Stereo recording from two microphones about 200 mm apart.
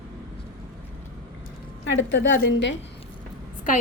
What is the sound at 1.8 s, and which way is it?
Speech, 65° left (ahead or behind).